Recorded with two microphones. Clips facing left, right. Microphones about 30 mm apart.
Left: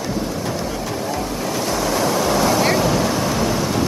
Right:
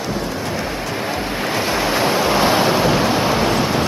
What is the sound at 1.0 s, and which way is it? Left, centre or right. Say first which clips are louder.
Waves: right 2 dB; right.